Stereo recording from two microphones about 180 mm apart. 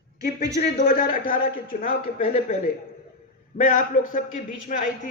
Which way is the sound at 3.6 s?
50° left (ahead or behind).